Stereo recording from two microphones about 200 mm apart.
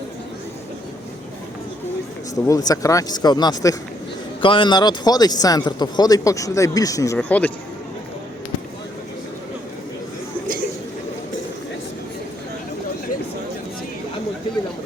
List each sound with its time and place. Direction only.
2.3 s speech: 15° left (ahead or behind)